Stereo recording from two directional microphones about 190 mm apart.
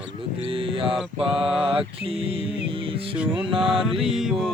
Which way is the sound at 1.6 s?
30° right (ahead or behind).